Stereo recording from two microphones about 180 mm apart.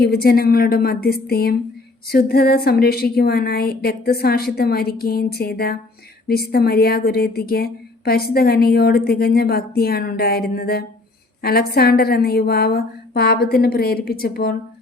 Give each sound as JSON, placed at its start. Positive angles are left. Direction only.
{"t": 0.0, "sound": "speech", "side_deg": 60}